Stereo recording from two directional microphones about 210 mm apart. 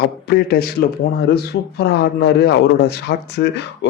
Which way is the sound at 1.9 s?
50° left (ahead or behind).